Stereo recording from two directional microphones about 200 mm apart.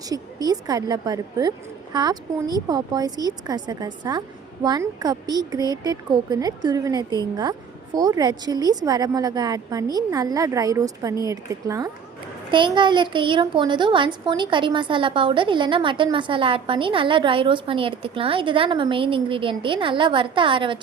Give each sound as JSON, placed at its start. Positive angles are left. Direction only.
{"t": 0.1, "sound": "a woman's voice", "side_deg": -20}